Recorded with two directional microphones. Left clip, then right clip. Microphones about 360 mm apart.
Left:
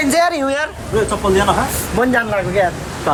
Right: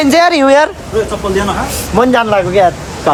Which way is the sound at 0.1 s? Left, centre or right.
Right.